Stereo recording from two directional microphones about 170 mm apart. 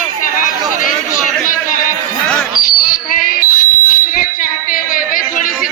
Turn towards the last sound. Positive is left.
turn(degrees=55)  # may be behind; listen again after turning